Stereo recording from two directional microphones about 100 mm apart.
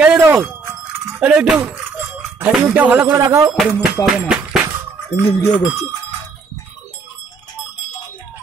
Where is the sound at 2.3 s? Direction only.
15° right (ahead or behind).